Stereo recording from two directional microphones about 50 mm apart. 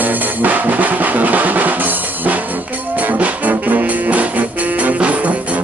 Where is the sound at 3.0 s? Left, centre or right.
Right.